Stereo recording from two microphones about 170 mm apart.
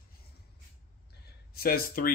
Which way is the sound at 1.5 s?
60° left (ahead or behind).